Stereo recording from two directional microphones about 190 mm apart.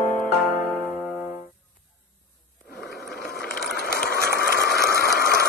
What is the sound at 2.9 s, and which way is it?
Vehicle, 55° left (ahead or behind).